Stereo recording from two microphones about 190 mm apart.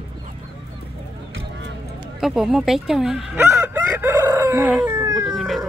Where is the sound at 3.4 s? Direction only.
10° right (ahead or behind).